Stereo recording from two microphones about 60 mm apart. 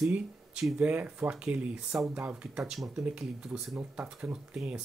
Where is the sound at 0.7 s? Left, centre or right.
Right.